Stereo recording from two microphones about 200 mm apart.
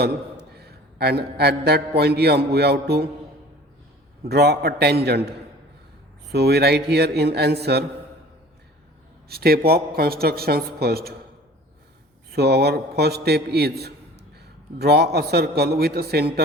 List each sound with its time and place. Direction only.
0.5 s a man's voice: 55° right (ahead or behind)
4.2 s a man's voice: 55° right (ahead or behind)
6.3 s a man's voice: 55° right (ahead or behind)
9.3 s a man's voice: 50° right (ahead or behind)
12.3 s a man's voice: 55° right (ahead or behind)